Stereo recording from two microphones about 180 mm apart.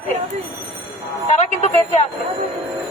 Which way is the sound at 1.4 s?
40° left (ahead or behind).